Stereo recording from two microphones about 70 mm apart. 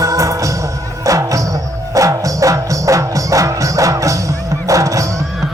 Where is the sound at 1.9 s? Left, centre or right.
Right.